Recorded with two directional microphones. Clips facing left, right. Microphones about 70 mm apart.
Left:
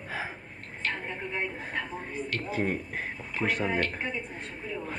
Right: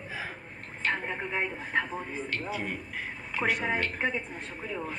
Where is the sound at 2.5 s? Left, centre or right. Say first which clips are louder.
Left 4 dB; left.